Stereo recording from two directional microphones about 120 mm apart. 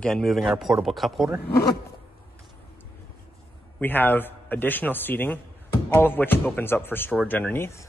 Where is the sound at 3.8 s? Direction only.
15° left (ahead or behind).